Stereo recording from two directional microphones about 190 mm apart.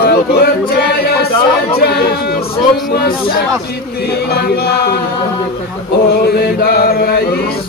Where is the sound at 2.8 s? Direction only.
50° left (ahead or behind).